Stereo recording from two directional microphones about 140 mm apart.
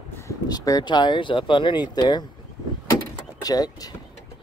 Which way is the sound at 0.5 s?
30° left (ahead or behind).